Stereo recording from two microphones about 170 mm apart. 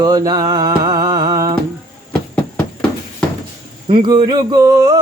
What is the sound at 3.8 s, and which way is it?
Speech, 30° right (ahead or behind).